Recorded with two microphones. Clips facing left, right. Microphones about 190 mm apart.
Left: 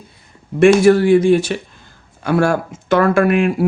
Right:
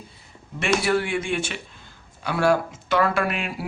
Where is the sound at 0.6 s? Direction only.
45° left (ahead or behind).